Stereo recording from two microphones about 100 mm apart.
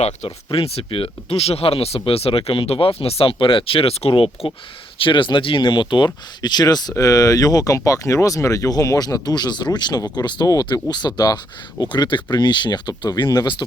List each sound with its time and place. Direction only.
0.0 s speech: 80° left
5.0 s speech: 55° left (ahead or behind)